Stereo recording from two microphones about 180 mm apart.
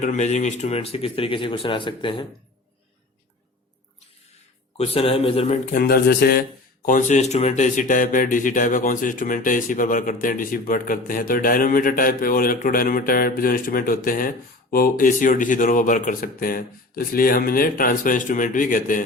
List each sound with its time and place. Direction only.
0.0 s speech: 40° left (ahead or behind)
4.8 s speech: 30° left (ahead or behind)
5.7 s speech: 55° left (ahead or behind)
6.8 s speech: 45° left (ahead or behind)